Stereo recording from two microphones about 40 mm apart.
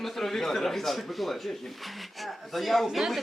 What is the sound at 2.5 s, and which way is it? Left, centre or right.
Speech, centre.